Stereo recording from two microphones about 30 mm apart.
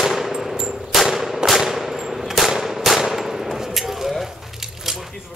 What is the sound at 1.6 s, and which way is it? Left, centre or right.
Machine gun, centre.